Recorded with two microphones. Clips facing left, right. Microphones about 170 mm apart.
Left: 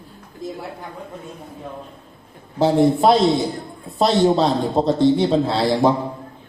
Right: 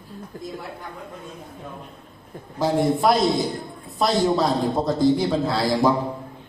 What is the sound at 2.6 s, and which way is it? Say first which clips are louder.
A man's voice: left 5 dB; 25° left (ahead or behind).